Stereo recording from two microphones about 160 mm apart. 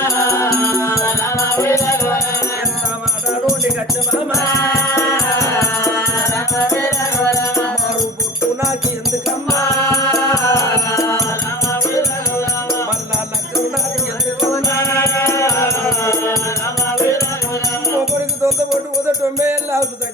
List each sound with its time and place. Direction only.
0.0 s music: 20° left (ahead or behind)
4.4 s music: 20° left (ahead or behind)
10.3 s music: 20° left (ahead or behind)
14.5 s music: 15° left (ahead or behind)
19.4 s music: 15° right (ahead or behind)